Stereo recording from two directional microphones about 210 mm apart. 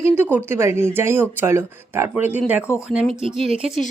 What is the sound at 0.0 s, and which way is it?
Speech, 10° right (ahead or behind).